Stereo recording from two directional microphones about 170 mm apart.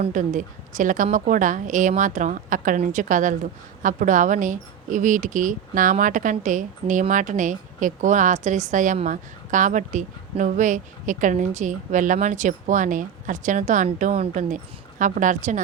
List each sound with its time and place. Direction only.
0.0 s a woman's voice: 45° right (ahead or behind)